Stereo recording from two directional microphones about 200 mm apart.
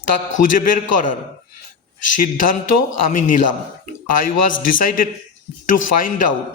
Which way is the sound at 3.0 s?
40° left (ahead or behind).